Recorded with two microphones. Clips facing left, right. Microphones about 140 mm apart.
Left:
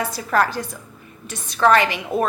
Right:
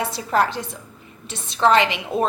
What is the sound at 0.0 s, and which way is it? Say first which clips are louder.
A woman's voice: even; 25° right (ahead or behind).